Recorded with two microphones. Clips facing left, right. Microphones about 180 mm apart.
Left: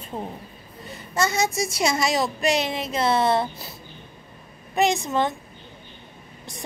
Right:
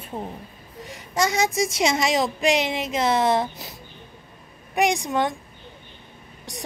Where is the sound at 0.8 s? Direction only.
90° right.